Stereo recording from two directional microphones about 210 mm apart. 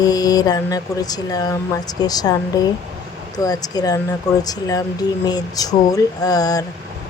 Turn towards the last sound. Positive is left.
turn(degrees=15)  # may be behind; listen again after turning